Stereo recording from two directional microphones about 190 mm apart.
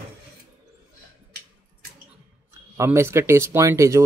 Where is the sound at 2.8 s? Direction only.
15° right (ahead or behind).